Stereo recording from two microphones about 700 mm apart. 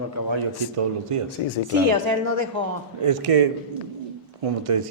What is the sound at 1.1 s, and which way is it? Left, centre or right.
Speech, right.